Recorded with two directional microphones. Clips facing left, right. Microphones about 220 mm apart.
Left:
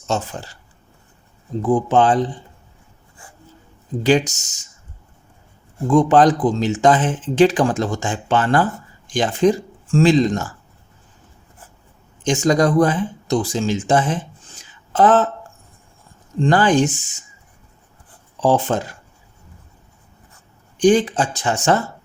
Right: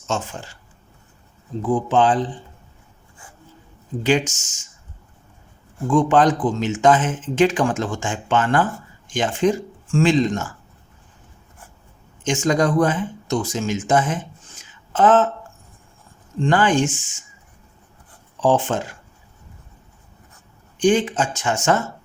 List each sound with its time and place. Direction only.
0.1 s speech: 35° left (ahead or behind)
1.7 s speech: 45° left (ahead or behind)
4.0 s speech: 35° left (ahead or behind)
5.9 s speech: 40° left (ahead or behind)
12.2 s speech: 35° left (ahead or behind)
16.4 s speech: 35° left (ahead or behind)
18.3 s speech: 40° left (ahead or behind)
20.7 s speech: 35° left (ahead or behind)